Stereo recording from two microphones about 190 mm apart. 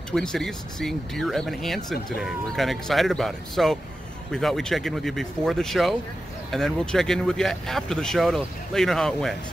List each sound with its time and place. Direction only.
0.1 s speech: centre (ahead or behind)